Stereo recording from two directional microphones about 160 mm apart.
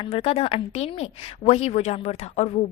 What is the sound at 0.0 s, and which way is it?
A woman's voice, 35° left (ahead or behind).